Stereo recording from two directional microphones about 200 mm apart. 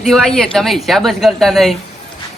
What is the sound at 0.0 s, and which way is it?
Speech, centre (ahead or behind).